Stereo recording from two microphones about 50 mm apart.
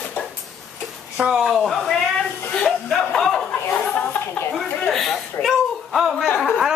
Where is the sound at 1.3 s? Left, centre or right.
Centre.